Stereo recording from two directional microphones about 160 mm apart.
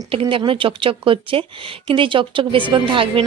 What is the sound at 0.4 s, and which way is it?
Speech, 35° right (ahead or behind).